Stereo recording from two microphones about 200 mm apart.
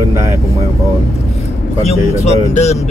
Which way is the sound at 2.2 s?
35° left (ahead or behind).